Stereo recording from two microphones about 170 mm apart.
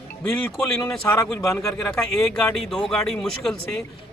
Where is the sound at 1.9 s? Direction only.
5° left (ahead or behind).